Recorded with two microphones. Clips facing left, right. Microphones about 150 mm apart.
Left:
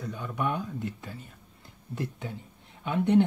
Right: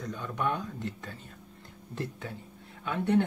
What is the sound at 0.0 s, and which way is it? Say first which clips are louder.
Speech: left 1 dB; 10° left (ahead or behind).